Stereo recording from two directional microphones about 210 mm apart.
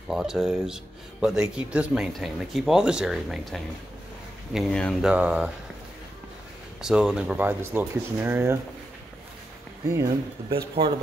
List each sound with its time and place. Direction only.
0.1 s speech: centre (ahead or behind)
6.8 s speech: 5° right (ahead or behind)
9.8 s speech: 15° right (ahead or behind)
10.8 s speech: 25° right (ahead or behind)